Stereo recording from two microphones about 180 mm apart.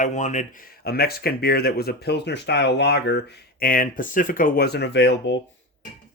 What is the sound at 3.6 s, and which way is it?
Speech, 50° left (ahead or behind).